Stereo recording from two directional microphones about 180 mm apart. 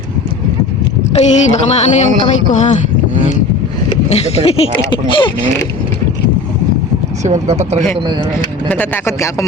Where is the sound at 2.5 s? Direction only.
40° left (ahead or behind).